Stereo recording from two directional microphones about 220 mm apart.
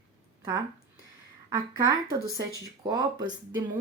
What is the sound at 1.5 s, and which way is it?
Speech, 15° right (ahead or behind).